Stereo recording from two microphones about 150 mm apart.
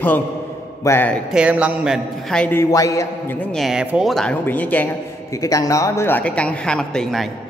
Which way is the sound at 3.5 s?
Centre (ahead or behind).